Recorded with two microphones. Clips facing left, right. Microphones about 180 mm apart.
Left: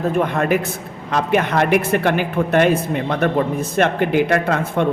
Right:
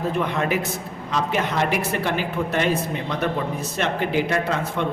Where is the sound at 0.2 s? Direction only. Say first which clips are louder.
Left 6 dB; 50° left (ahead or behind).